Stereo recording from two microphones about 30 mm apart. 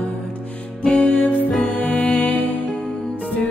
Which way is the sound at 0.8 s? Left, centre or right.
Left.